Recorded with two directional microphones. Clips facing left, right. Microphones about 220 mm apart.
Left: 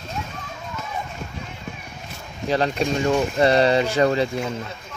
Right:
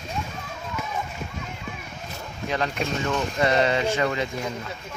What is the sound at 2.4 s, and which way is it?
Speech, 35° left (ahead or behind).